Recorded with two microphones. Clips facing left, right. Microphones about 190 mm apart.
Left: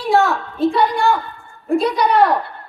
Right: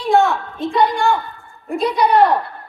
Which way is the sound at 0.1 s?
Centre (ahead or behind).